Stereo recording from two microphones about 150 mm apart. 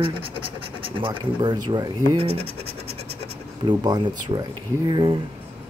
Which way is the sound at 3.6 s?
30° right (ahead or behind).